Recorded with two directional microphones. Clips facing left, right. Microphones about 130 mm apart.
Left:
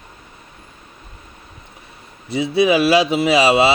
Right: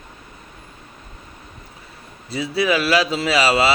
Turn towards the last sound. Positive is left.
turn(degrees=20)  # may be behind; listen again after turning